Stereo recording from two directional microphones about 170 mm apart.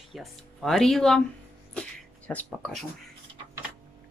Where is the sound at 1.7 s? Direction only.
5° left (ahead or behind).